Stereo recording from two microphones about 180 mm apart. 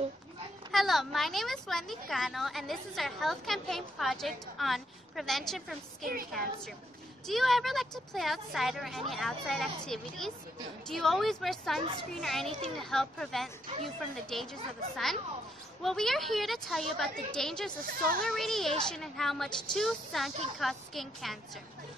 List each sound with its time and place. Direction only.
0.7 s a woman's voice: centre (ahead or behind)
17.8 s speech: 55° right (ahead or behind)
18.2 s a woman's voice: centre (ahead or behind)